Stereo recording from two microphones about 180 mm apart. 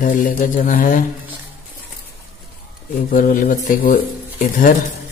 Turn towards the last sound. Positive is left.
turn(degrees=50)  # may be behind; listen again after turning